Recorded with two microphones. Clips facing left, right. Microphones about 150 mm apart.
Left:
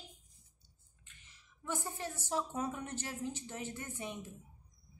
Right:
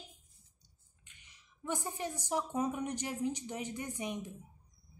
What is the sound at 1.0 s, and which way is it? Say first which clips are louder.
Speech: even; 15° right (ahead or behind).